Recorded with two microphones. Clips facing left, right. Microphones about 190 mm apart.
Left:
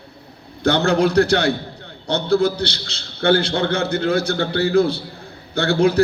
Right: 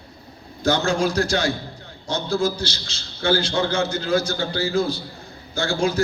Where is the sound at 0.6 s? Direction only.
65° left (ahead or behind).